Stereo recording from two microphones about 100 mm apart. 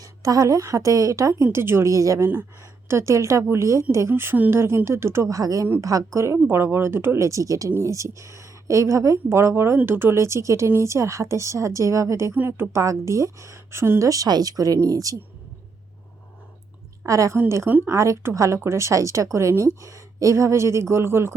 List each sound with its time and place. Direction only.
0.0 s a woman's voice: 35° right (ahead or behind)
17.1 s a woman's voice: 30° right (ahead or behind)